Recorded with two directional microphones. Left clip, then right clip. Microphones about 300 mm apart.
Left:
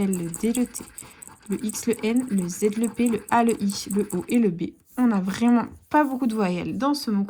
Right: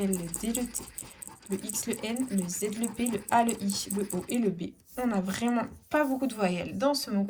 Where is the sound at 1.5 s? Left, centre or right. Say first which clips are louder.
Left 8 dB; centre.